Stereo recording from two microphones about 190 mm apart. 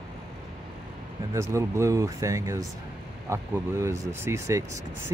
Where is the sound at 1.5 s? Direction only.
15° right (ahead or behind).